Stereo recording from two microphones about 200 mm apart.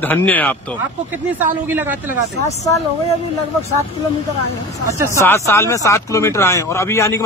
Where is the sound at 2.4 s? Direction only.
15° left (ahead or behind).